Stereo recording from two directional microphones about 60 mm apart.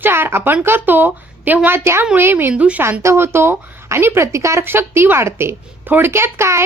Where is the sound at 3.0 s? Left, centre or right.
Right.